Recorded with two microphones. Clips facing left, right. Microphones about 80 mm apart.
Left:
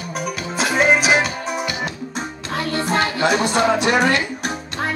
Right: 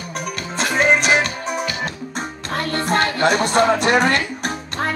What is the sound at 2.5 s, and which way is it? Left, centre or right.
Music, right.